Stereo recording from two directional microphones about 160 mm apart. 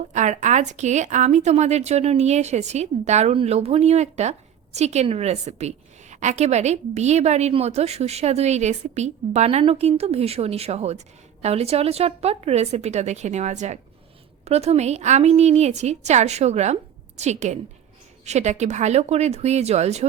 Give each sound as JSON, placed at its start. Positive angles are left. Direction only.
{"t": 0.1, "sound": "a woman's voice", "side_deg": -50}